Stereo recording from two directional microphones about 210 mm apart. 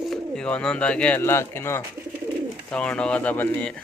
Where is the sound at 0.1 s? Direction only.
5° left (ahead or behind).